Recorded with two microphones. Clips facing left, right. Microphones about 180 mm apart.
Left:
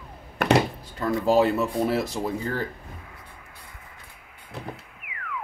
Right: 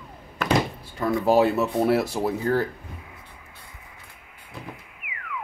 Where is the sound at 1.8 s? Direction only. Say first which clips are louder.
Right 3 dB; 65° right (ahead or behind).